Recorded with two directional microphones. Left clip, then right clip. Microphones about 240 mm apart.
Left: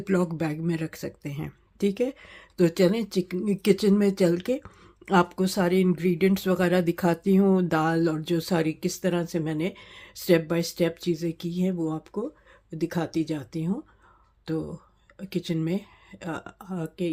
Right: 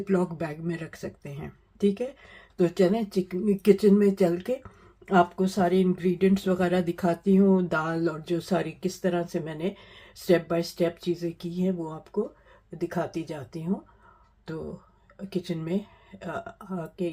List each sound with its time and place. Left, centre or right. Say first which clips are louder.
0.0 s speech: left 1 dB; left
15.3 s speech: left 2 dB; left